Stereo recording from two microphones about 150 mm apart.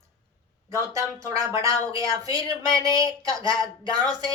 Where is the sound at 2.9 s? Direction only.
30° left (ahead or behind).